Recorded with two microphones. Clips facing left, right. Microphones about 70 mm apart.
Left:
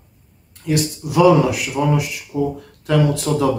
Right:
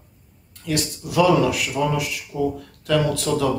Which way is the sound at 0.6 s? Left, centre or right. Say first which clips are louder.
Left 5 dB; centre.